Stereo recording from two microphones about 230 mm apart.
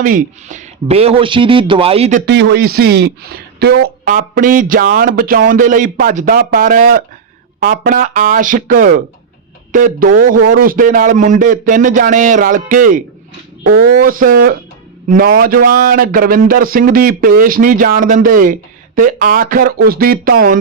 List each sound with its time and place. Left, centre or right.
0.0 s speech: right
2.2 s a man's voice: right